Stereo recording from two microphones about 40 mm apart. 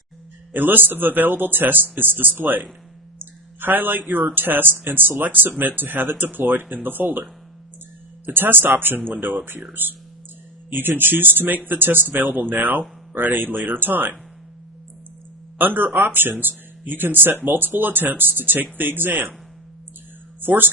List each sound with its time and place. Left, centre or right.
0.5 s speech: right
3.2 s a sound: right
4.4 s speech: right
8.3 s speech: right
15.5 s speech: right
20.4 s speech: right